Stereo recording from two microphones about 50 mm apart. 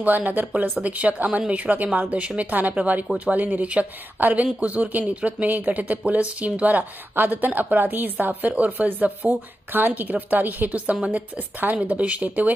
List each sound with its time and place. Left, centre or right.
0.0 s speech: right